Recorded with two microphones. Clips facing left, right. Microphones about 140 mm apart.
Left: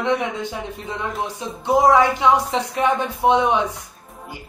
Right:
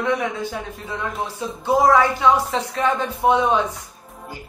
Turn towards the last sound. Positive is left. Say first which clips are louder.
# left 1 dB
turn(degrees=15)  # may be behind; listen again after turning